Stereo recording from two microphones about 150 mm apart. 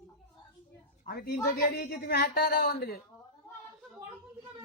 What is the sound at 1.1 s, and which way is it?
A woman's voice, 90° left.